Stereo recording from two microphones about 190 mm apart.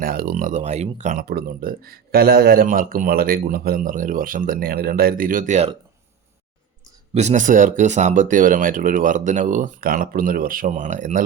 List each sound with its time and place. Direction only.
0.0 s speech: 50° right (ahead or behind)
1.2 s speech: 55° right (ahead or behind); by 5.7 s 40° right (ahead or behind)
7.1 s speech: 35° right (ahead or behind)